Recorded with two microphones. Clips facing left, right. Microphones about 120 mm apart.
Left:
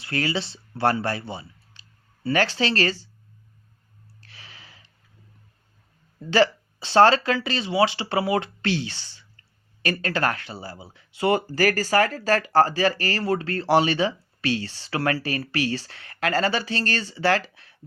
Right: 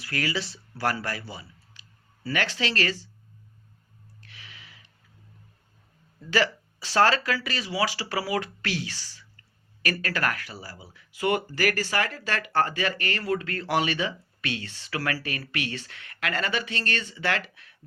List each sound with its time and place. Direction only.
0.0 s speech: 30° left (ahead or behind)
4.2 s a sound: 35° left (ahead or behind)
6.3 s speech: 30° left (ahead or behind)